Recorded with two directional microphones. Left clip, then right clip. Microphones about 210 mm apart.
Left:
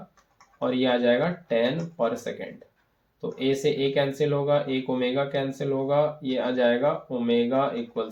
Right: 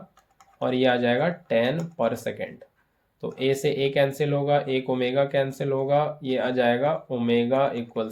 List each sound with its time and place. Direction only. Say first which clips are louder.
0.6 s speech: right 1 dB; 45° right (ahead or behind)